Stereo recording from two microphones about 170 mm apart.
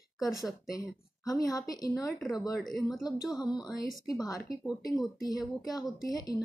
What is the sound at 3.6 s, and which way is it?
Speech, 20° left (ahead or behind).